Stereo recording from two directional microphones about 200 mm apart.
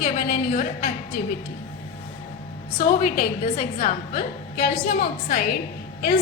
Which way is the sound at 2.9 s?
45° left (ahead or behind).